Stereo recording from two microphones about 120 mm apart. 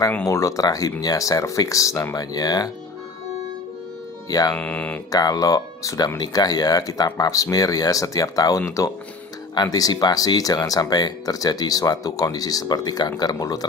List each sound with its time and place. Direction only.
0.3 s speech: 25° left (ahead or behind)
4.3 s speech: 30° left (ahead or behind)
4.6 s speech: 10° left (ahead or behind)
5.1 s speech: 30° left (ahead or behind)